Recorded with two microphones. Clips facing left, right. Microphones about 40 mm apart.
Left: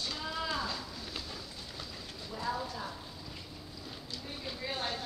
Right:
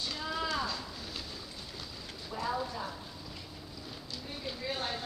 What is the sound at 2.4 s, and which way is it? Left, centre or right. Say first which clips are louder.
Clip-clop: right 1 dB; centre.